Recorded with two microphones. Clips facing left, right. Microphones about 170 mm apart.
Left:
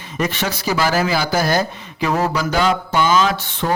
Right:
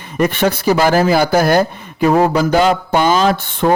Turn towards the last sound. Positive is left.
turn(degrees=-50)  # may be behind; listen again after turning